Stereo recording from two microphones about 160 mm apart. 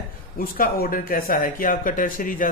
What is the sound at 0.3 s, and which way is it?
Speech, 65° left (ahead or behind).